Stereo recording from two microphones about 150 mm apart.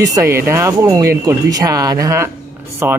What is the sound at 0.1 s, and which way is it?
Speech, 20° right (ahead or behind).